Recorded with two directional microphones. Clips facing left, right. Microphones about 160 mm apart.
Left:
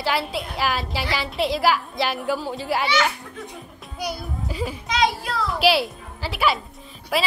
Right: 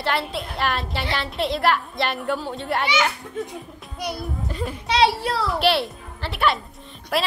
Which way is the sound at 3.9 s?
Centre (ahead or behind).